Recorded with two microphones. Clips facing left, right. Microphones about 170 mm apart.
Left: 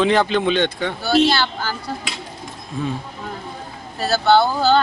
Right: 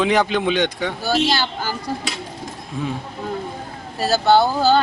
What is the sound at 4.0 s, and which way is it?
Speech, 10° right (ahead or behind).